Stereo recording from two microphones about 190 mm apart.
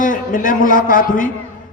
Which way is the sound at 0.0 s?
45° left (ahead or behind).